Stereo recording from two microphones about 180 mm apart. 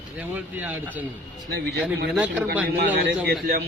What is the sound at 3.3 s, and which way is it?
Speech, 60° right (ahead or behind).